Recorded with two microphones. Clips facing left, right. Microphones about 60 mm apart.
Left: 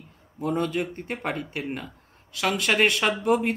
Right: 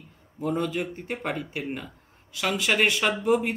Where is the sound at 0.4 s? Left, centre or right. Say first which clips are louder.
Left 1 dB; centre.